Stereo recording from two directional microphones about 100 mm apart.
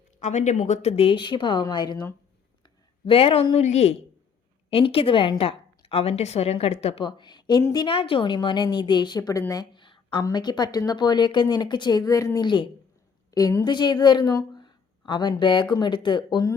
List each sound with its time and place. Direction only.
0.8 s speech: 90° left
1.2 s speech: 55° left (ahead or behind)
2.6 s speech: 65° left (ahead or behind); by 3.9 s 90° left
4.7 s a woman's voice: 65° left (ahead or behind); by 7.0 s 85° left
7.0 s a woman's voice: 50° left (ahead or behind)
7.9 s speech: 65° left (ahead or behind); by 9.4 s 40° left (ahead or behind)
9.7 s a sound: 55° left (ahead or behind)
10.2 s a woman's voice: 45° left (ahead or behind)
13.7 s speech: 50° left (ahead or behind)
14.6 s a sound: 50° left (ahead or behind)
15.7 s speech: 50° left (ahead or behind)